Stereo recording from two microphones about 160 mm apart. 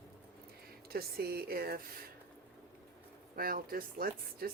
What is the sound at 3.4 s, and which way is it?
Speech, 65° right (ahead or behind).